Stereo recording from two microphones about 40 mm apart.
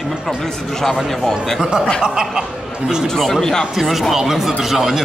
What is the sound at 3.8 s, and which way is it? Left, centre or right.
Speech, centre.